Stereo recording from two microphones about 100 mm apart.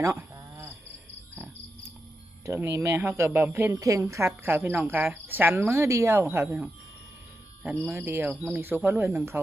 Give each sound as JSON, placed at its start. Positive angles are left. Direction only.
{"t": 0.0, "sound": "cricket", "side_deg": -30}
{"t": 2.5, "sound": "speech", "side_deg": -25}
{"t": 3.8, "sound": "speech", "side_deg": -35}
{"t": 7.9, "sound": "speech", "side_deg": -20}